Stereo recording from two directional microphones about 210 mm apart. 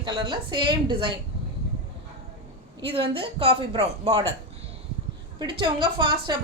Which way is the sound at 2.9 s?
25° right (ahead or behind).